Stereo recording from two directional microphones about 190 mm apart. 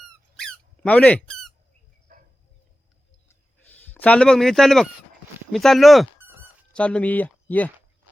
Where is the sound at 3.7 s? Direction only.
10° left (ahead or behind).